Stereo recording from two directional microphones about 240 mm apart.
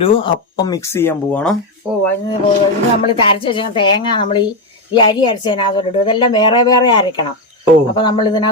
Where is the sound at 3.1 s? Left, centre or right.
Left.